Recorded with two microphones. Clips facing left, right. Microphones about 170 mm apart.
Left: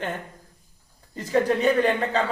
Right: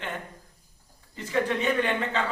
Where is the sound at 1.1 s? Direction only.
40° left (ahead or behind).